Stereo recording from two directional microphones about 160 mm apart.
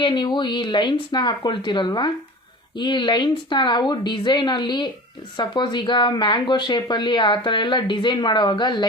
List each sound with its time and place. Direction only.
0.0 s speech: 30° left (ahead or behind)